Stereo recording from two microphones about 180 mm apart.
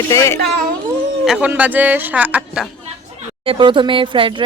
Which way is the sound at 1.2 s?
5° right (ahead or behind).